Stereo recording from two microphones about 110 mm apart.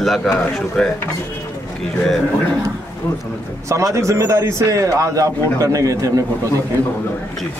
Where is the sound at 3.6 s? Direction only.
30° right (ahead or behind).